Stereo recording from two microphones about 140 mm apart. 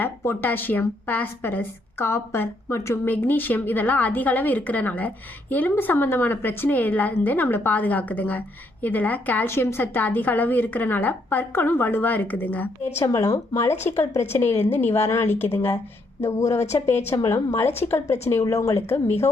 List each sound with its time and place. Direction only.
0.0 s a woman's voice: 15° left (ahead or behind)